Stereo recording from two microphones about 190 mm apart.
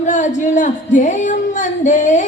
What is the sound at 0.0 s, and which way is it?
Music, 40° left (ahead or behind).